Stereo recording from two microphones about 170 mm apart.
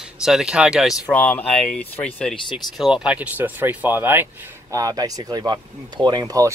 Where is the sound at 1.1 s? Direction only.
5° left (ahead or behind); by 6.5 s 20° right (ahead or behind).